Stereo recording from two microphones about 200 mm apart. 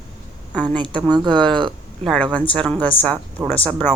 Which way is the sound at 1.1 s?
20° right (ahead or behind).